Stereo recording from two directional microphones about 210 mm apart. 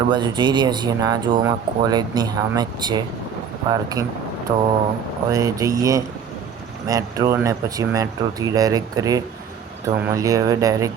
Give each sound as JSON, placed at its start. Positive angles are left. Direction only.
{"t": 0.1, "sound": "speech", "side_deg": -20}